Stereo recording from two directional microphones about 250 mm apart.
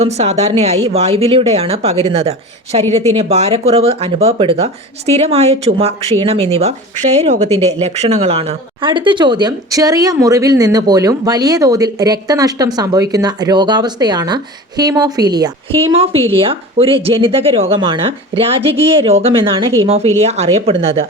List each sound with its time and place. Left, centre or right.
0.0 s speech: right